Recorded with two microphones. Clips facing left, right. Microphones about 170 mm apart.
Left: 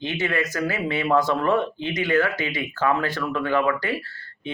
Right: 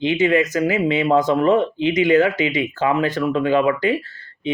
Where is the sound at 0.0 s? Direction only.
15° right (ahead or behind).